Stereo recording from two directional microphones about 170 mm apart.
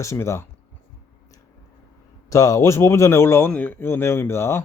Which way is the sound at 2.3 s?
20° left (ahead or behind).